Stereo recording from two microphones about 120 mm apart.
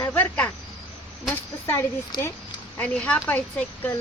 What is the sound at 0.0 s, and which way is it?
Cricket, 15° left (ahead or behind).